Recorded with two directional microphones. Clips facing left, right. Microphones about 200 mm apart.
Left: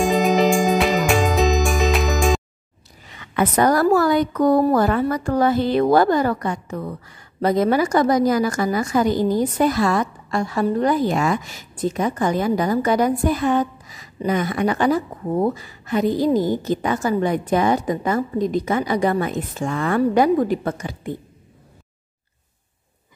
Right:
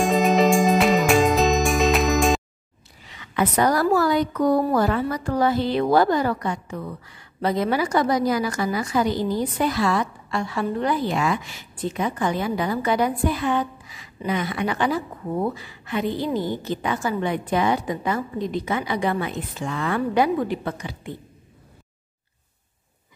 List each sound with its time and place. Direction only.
0.0 s music: centre (ahead or behind)
3.1 s a woman's voice: 50° left (ahead or behind)